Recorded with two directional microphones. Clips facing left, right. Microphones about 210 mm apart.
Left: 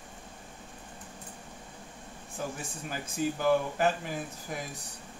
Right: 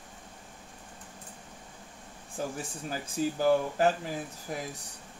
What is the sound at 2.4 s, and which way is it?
Speech, 30° right (ahead or behind).